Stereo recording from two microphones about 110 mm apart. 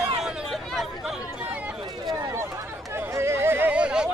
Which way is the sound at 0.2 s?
5° right (ahead or behind).